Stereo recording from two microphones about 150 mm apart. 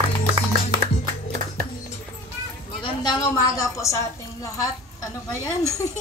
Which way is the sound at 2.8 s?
30° left (ahead or behind).